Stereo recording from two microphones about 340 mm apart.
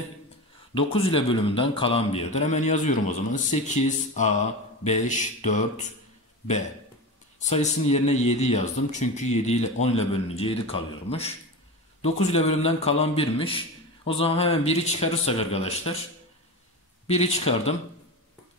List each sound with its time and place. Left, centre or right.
0.7 s speech: centre
4.8 s speech: left
7.4 s a man's voice: centre
17.1 s speech: centre